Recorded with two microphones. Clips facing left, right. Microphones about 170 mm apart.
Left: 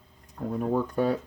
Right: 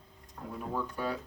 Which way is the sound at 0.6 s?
50° left (ahead or behind).